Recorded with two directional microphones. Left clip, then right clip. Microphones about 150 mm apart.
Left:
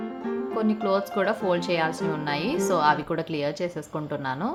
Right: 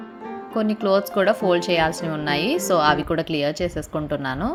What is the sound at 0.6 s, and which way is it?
A woman's voice, 30° right (ahead or behind).